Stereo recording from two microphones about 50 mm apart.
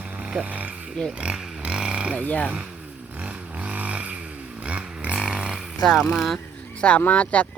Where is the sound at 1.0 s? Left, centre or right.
Centre.